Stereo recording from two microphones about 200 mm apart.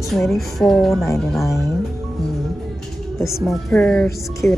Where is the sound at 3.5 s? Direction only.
5° left (ahead or behind).